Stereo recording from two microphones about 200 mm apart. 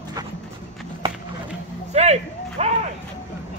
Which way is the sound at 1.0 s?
25° right (ahead or behind).